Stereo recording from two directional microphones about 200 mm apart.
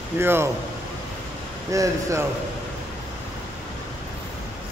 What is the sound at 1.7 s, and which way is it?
Speech, 15° right (ahead or behind).